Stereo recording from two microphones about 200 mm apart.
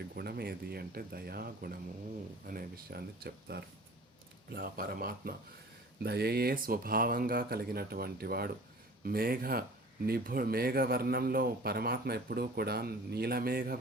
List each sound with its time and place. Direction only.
0.1 s a man's voice: 50° right (ahead or behind)